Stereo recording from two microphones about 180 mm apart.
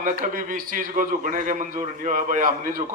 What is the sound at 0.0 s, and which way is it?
A man's voice, 50° right (ahead or behind).